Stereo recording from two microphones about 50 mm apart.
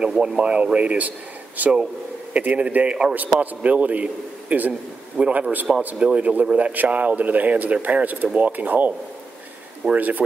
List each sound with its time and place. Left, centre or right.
0.2 s a man's voice: right
9.9 s a man's voice: right